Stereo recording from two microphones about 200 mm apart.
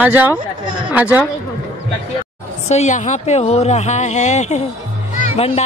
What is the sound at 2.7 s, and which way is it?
Speech, 35° left (ahead or behind).